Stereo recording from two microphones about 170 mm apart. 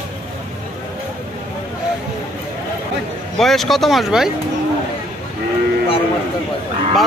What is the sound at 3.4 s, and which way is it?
Speech, centre (ahead or behind).